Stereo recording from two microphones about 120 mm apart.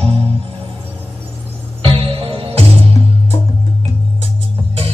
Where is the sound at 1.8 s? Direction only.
45° right (ahead or behind).